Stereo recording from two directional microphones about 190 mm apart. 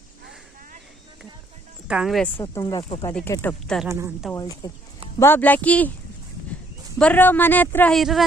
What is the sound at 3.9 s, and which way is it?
Speech, 15° right (ahead or behind).